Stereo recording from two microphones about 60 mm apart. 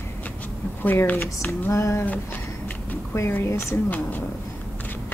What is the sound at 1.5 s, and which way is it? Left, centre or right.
Speech, left.